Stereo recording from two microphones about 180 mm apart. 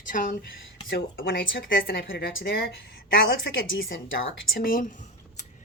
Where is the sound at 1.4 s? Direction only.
55° left (ahead or behind).